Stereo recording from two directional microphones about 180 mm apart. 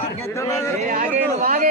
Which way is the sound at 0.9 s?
45° right (ahead or behind).